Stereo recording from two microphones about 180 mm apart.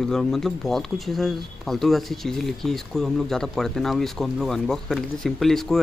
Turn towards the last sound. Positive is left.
turn(degrees=0)  # may be behind; listen again after turning